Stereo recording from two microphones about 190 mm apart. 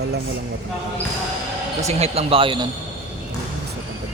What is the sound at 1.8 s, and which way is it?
Speech, 35° right (ahead or behind).